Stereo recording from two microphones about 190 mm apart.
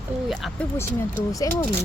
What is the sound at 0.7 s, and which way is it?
Speech, 15° left (ahead or behind).